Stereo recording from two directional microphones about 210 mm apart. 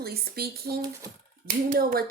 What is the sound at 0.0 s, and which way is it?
Speech, 45° right (ahead or behind).